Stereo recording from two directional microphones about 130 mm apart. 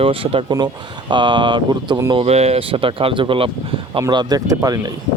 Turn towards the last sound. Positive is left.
turn(degrees=-30)  # may be behind; listen again after turning